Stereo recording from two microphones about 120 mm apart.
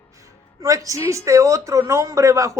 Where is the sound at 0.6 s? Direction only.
25° right (ahead or behind).